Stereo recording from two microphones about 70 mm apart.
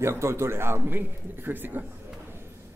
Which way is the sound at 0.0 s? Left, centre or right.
Right.